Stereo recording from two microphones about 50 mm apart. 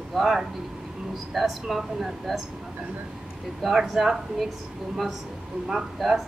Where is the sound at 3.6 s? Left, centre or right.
Centre.